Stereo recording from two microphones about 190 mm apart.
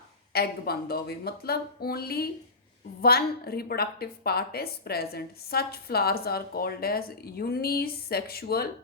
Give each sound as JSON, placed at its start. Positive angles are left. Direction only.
{"t": 0.3, "sound": "a woman's voice", "side_deg": 55}